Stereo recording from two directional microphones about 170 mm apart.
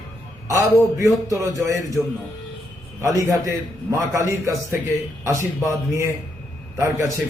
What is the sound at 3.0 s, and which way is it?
A man's voice, 15° right (ahead or behind).